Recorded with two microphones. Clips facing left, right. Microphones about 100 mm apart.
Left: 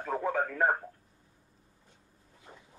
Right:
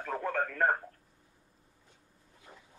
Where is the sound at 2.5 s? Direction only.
20° left (ahead or behind).